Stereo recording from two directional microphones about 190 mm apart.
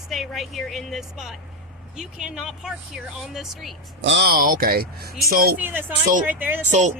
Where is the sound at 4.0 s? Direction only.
65° right (ahead or behind).